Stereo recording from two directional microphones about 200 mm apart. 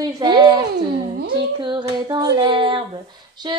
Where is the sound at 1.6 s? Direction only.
25° right (ahead or behind).